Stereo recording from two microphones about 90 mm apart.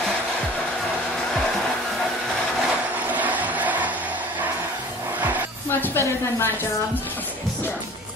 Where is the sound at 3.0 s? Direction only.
20° right (ahead or behind).